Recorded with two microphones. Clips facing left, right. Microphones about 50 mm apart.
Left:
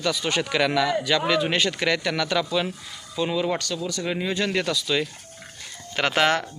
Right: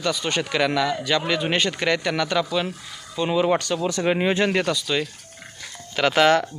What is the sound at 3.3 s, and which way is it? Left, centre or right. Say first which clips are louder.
Speech: right 7 dB; right.